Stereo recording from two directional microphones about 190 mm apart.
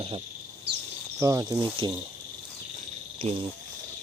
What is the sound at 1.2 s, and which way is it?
Speech, 15° right (ahead or behind).